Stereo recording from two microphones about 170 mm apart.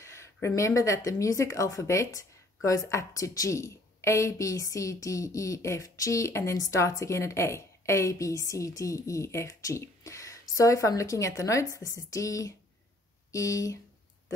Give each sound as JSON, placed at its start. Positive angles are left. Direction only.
{"t": 0.0, "sound": "speech", "side_deg": 15}